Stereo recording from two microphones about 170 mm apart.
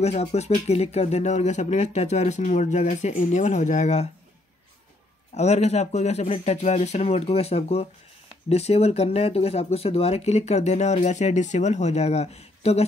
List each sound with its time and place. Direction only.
0.0 s speech: 40° left (ahead or behind)
5.3 s speech: 40° left (ahead or behind)